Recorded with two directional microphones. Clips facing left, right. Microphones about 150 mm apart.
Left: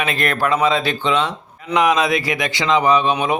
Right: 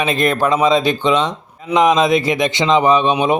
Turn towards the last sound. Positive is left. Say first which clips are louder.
# right 3 dB
turn(degrees=-25)  # may be behind; listen again after turning